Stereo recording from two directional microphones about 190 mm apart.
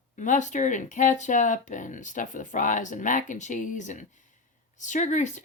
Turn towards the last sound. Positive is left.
turn(degrees=40)  # may be behind; listen again after turning